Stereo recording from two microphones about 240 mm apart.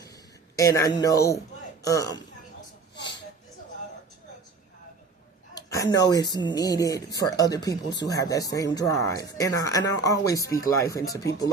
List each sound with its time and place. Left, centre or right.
0.5 s speech: centre
2.9 s a sound: left
5.5 s speech: centre